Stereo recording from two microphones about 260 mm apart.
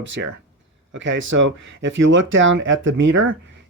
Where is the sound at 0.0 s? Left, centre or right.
Right.